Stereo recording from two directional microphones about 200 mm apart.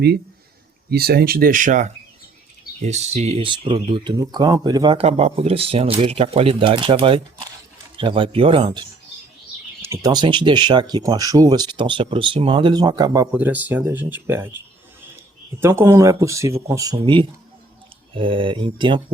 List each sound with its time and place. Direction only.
0.9 s speech: 50° right (ahead or behind); by 13.2 s 20° right (ahead or behind)
13.3 s speech: 10° right (ahead or behind)
15.6 s speech: 15° right (ahead or behind)